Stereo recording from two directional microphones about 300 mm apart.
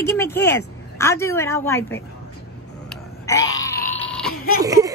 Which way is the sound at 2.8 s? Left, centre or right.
Centre.